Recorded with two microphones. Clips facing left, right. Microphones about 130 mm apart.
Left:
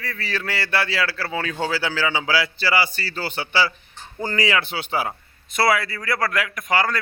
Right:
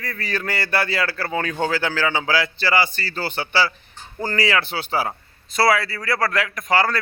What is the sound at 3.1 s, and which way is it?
Speech, 40° right (ahead or behind).